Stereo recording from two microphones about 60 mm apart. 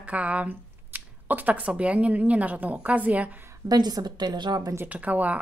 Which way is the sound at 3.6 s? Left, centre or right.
Right.